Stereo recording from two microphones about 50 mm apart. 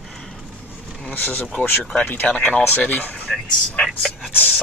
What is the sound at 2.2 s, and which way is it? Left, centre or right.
Speech, left.